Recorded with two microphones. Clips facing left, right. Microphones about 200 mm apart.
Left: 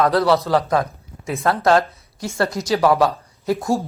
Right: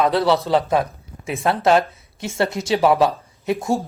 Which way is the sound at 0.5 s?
25° right (ahead or behind).